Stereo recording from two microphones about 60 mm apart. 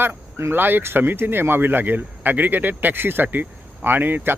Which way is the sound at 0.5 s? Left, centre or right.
Right.